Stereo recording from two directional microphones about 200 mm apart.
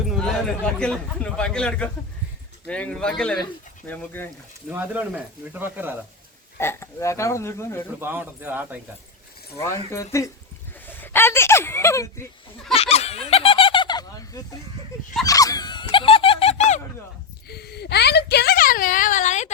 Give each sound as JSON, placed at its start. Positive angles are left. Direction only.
{"t": 0.2, "sound": "a man's voice", "side_deg": 5}
{"t": 4.7, "sound": "speech", "side_deg": -10}
{"t": 6.6, "sound": "speech", "side_deg": 10}
{"t": 8.0, "sound": "speech", "side_deg": -10}
{"t": 9.6, "sound": "speech", "side_deg": 15}
{"t": 12.7, "sound": "a sound", "side_deg": 30}
{"t": 15.3, "sound": "dog", "side_deg": 15}
{"t": 17.5, "sound": "a sound", "side_deg": 55}